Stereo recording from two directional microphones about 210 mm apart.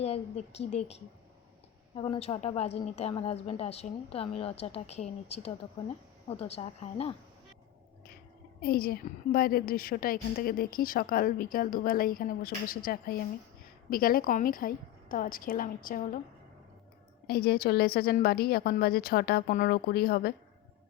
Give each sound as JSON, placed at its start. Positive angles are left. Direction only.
{"t": 0.0, "sound": "a woman's voice", "side_deg": 30}
{"t": 8.6, "sound": "a woman's voice", "side_deg": 45}
{"t": 17.2, "sound": "a woman's voice", "side_deg": 50}